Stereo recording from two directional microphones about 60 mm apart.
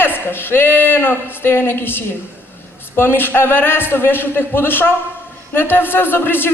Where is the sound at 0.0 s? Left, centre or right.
Left.